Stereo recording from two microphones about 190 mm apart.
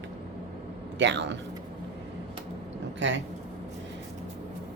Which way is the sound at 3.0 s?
75° right (ahead or behind).